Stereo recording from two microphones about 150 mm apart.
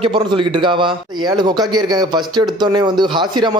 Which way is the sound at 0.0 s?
35° right (ahead or behind).